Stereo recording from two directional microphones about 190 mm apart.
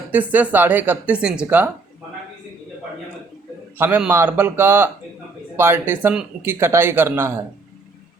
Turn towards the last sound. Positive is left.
turn(degrees=-10)  # may be behind; listen again after turning